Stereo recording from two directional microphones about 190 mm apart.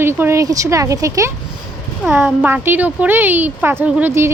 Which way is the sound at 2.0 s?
5° right (ahead or behind).